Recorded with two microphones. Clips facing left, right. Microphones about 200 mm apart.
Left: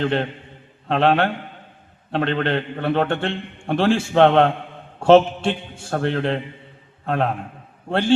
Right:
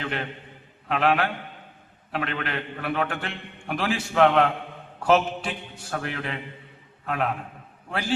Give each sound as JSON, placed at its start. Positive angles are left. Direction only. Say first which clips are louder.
{"t": 0.0, "sound": "a man's voice", "louder": "left 9 dB", "side_deg": 30}